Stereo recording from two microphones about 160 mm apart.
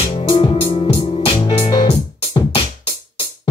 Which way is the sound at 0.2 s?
30° left (ahead or behind).